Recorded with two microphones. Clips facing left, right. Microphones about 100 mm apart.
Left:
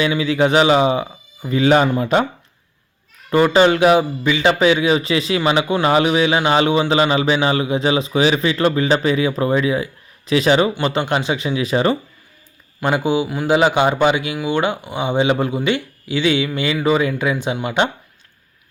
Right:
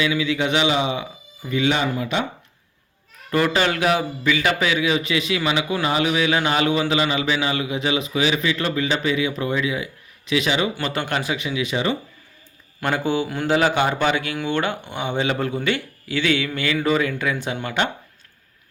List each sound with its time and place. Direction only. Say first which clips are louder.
0.0 s speech: left 5 dB; 35° left (ahead or behind)
3.2 s speech: left 7 dB; 25° left (ahead or behind)
10.8 s speech: left 5 dB; 20° left (ahead or behind); by 11.9 s 40° left (ahead or behind)
12.8 s speech: left 4 dB; 15° left (ahead or behind)
13.5 s speech: left 4 dB; 15° left (ahead or behind)